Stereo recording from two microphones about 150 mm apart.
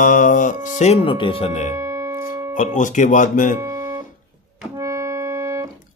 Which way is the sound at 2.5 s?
60° left (ahead or behind).